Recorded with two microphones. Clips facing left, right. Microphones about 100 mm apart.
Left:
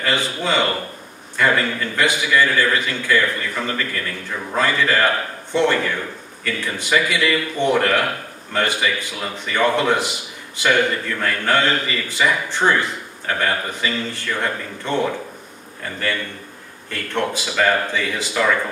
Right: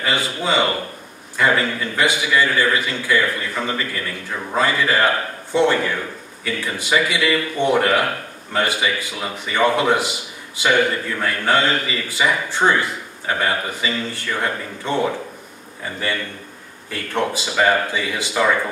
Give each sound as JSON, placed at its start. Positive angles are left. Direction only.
{"t": 0.0, "sound": "a man's voice", "side_deg": -15}